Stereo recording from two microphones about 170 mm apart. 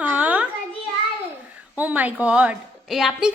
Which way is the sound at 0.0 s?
10° right (ahead or behind).